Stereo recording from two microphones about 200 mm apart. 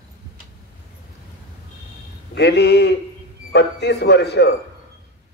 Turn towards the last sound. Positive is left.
turn(degrees=55)  # may be behind; listen again after turning